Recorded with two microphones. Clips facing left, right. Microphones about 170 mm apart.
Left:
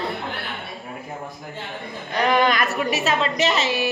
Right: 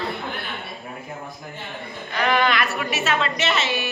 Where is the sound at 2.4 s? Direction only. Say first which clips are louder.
Left 2 dB; 40° left (ahead or behind).